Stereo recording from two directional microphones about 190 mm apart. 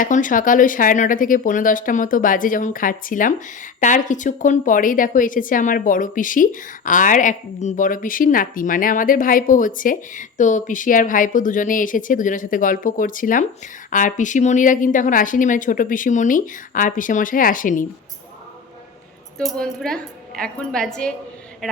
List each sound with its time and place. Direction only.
0.0 s speech: 45° left (ahead or behind)
19.5 s a woman's voice: centre (ahead or behind)